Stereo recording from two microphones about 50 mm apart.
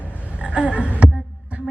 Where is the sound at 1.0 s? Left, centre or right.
Right.